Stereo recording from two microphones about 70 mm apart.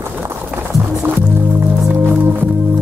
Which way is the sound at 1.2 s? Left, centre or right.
Right.